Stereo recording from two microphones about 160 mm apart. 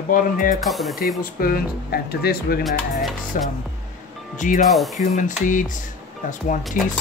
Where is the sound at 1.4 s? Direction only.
70° left (ahead or behind).